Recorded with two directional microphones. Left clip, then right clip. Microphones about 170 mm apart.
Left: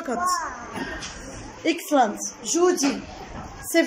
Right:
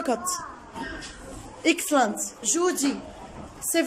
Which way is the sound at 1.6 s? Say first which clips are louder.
Left 1 dB; 5° right (ahead or behind).